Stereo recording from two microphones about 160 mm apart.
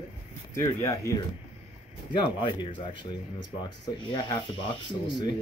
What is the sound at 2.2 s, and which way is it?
Speech, 30° left (ahead or behind).